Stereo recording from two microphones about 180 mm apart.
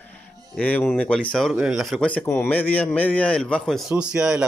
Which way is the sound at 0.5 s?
10° left (ahead or behind).